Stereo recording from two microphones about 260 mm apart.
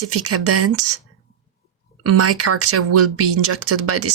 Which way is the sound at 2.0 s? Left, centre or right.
Right.